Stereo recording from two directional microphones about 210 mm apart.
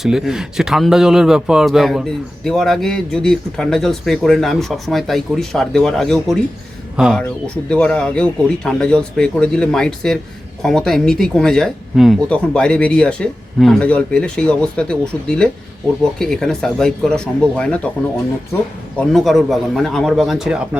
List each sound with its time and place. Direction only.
0.0 s speech: centre (ahead or behind)
18.9 s speech: centre (ahead or behind)